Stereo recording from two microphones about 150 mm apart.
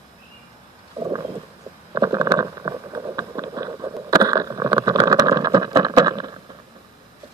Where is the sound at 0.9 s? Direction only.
25° right (ahead or behind).